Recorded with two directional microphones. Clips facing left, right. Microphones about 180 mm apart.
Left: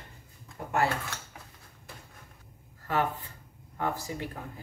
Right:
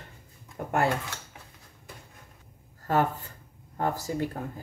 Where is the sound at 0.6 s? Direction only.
60° right (ahead or behind).